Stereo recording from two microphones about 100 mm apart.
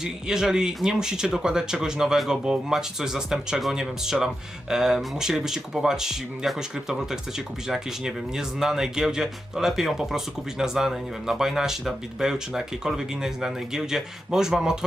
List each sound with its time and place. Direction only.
0.0 s speech: 5° right (ahead or behind)